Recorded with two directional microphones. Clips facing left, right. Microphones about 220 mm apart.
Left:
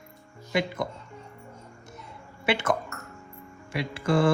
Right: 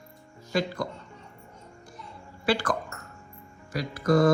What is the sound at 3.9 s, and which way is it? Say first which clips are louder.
Mantra: right 2 dB; 30° left (ahead or behind).